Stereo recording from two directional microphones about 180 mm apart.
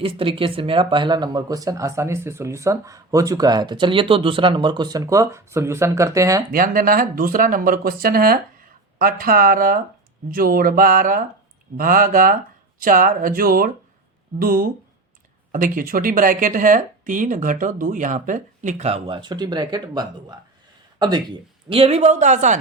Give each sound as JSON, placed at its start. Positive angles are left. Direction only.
{"t": 0.0, "sound": "speech", "side_deg": -30}
{"t": 6.5, "sound": "speech", "side_deg": -50}